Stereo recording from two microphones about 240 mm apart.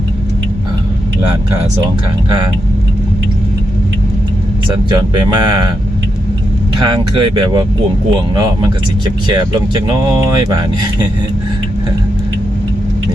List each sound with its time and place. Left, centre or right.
4.7 s speech: centre
6.8 s speech: centre